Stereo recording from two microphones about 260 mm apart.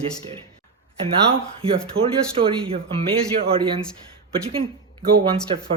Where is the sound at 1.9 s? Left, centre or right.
Right.